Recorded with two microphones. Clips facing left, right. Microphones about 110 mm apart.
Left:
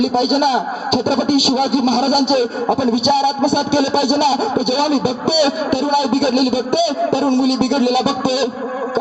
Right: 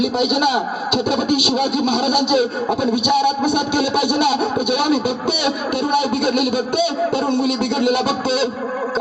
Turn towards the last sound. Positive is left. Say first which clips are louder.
# left 3 dB
turn(degrees=55)  # may be behind; listen again after turning